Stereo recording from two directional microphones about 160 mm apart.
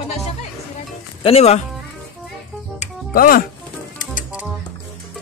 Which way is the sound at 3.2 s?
65° left (ahead or behind).